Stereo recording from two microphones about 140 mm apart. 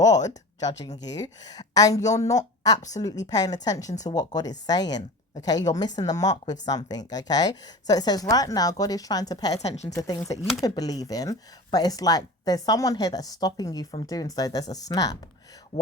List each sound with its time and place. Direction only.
0.0 s speech: 25° left (ahead or behind)
9.6 s a woman's voice: 50° left (ahead or behind)
9.9 s speech: 25° left (ahead or behind)